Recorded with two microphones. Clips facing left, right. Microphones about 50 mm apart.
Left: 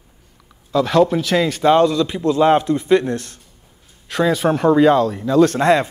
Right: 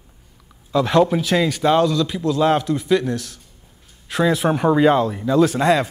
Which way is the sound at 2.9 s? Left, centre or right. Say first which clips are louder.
Left 3 dB; left.